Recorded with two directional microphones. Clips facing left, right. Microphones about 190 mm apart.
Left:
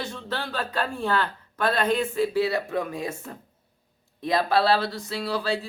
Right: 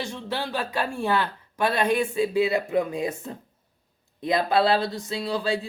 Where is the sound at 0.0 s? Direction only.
15° right (ahead or behind).